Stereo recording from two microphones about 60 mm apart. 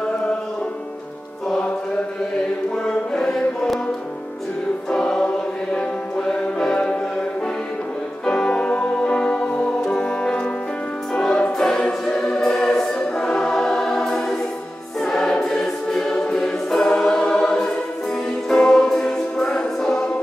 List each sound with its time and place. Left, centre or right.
2.7 s music: centre
4.9 s music: centre
8.3 s music: centre
11.1 s choir: centre
18.5 s music: centre